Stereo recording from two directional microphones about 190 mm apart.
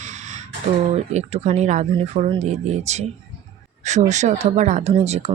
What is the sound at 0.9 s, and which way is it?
Speech, 35° right (ahead or behind).